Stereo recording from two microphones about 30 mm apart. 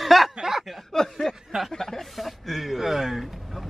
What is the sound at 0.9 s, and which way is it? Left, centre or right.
Speech, centre.